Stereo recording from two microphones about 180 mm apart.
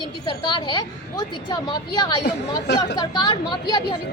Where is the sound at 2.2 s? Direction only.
65° left (ahead or behind).